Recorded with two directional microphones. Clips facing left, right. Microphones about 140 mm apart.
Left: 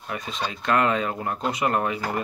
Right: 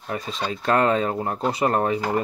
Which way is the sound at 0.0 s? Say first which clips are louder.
Right 2 dB; 35° right (ahead or behind).